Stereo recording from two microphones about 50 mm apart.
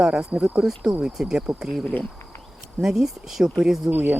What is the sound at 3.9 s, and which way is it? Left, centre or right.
Speech, right.